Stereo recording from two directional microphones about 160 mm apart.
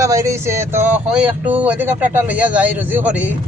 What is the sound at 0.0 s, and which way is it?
Speech, 20° right (ahead or behind).